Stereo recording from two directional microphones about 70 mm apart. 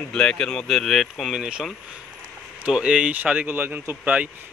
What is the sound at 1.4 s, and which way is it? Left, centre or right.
Speech, centre.